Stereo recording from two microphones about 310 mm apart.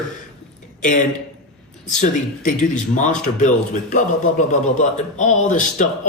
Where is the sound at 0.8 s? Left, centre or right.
Left.